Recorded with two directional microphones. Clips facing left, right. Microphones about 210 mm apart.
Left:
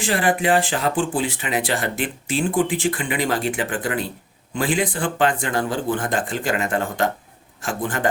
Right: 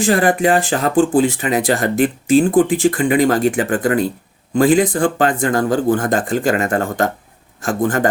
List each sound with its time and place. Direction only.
0.0 s speech: 45° right (ahead or behind)